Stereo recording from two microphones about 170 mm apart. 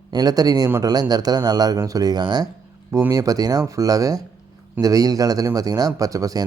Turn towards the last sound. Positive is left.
turn(degrees=-20)  # may be behind; listen again after turning